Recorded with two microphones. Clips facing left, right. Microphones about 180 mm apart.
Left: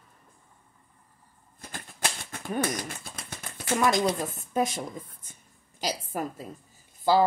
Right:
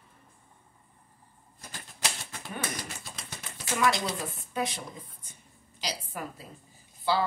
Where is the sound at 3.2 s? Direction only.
50° left (ahead or behind).